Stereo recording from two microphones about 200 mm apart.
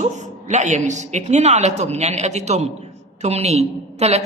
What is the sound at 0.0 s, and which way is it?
A man's voice, 35° right (ahead or behind).